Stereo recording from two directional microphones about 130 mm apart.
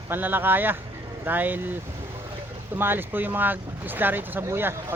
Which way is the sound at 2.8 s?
15° right (ahead or behind).